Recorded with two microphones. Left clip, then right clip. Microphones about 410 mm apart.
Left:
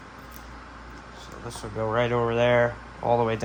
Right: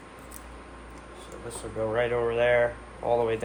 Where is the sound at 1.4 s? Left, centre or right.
Centre.